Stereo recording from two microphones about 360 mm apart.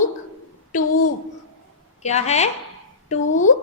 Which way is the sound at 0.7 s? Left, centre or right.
Left.